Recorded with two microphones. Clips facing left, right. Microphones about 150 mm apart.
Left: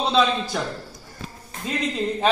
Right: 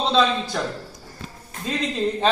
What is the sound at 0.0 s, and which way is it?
Speech, 5° left (ahead or behind).